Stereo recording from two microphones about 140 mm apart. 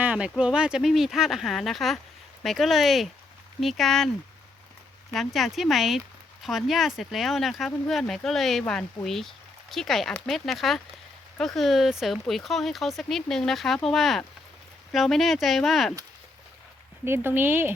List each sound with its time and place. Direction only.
0.0 s speech: 10° right (ahead or behind)
5.1 s speech: centre (ahead or behind)
17.1 s speech: 15° right (ahead or behind)